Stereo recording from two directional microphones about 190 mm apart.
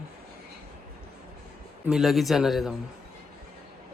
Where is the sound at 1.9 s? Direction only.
Centre (ahead or behind).